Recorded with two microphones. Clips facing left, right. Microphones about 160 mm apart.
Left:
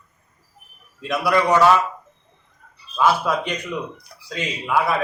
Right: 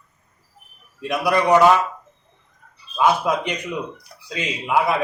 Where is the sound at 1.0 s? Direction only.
15° right (ahead or behind).